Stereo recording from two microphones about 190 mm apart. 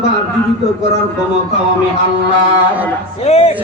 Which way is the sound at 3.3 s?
35° left (ahead or behind).